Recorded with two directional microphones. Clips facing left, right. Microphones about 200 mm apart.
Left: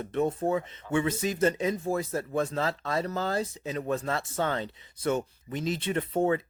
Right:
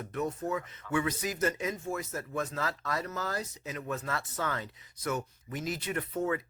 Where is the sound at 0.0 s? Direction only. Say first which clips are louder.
Left 6 dB; 25° left (ahead or behind).